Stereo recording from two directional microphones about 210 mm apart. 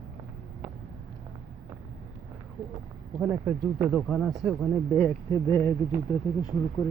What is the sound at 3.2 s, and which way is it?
Speech, 10° right (ahead or behind).